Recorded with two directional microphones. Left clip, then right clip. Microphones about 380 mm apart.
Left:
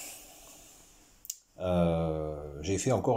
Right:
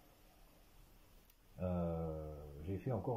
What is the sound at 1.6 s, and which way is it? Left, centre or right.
Mantra, centre.